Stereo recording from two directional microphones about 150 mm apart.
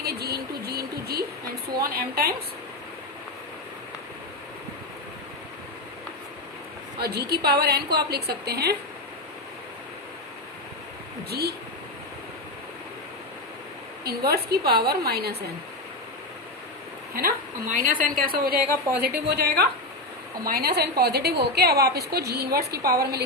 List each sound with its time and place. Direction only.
0.0 s a sound: 90° right
1.8 s a woman's voice: 85° right
7.0 s a woman's voice: 90° right
11.3 s a woman's voice: 90° right
14.0 s a woman's voice: 90° right
17.2 s a woman's voice: 70° right (ahead or behind)
19.0 s a woman's voice: 90° right